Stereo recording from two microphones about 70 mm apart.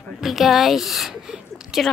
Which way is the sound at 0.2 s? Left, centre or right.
Centre.